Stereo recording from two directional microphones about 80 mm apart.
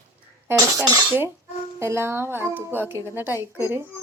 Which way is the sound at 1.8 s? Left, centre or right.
Right.